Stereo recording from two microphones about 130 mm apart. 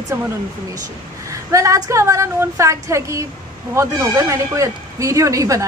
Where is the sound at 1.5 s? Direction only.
25° right (ahead or behind).